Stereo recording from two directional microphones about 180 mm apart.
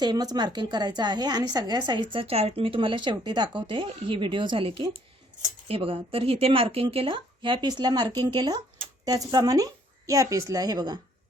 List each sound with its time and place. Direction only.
0.0 s speech: 20° right (ahead or behind)